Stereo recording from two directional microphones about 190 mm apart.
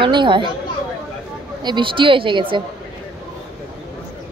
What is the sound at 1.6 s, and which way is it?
Speech, 25° right (ahead or behind).